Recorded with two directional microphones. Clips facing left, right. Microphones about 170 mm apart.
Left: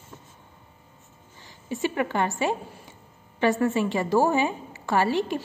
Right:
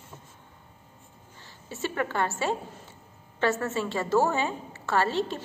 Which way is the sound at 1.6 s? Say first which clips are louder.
Left 4 dB; 15° left (ahead or behind).